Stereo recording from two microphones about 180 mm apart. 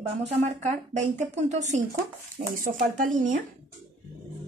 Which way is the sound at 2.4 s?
50° right (ahead or behind).